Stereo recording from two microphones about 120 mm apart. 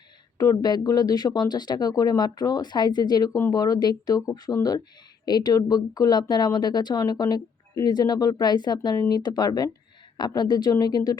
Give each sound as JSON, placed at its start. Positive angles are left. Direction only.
{"t": 0.3, "sound": "speech", "side_deg": 35}